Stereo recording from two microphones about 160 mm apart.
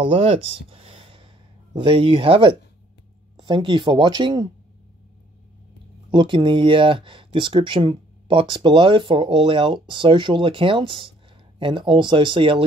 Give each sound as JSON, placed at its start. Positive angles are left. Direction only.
{"t": 0.0, "sound": "speech", "side_deg": -35}
{"t": 6.1, "sound": "speech", "side_deg": -30}